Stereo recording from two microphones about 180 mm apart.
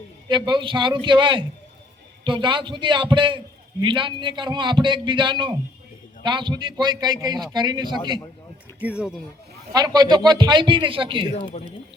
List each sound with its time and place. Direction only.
0.3 s a man's voice: 25° right (ahead or behind)
8.8 s speech: 5° right (ahead or behind)
9.7 s a man's voice: 20° right (ahead or behind)